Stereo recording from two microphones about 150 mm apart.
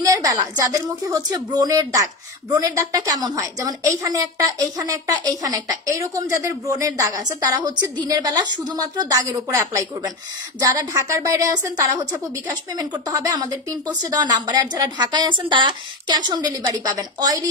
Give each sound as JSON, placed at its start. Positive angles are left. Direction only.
{"t": 0.0, "sound": "a woman's voice", "side_deg": -25}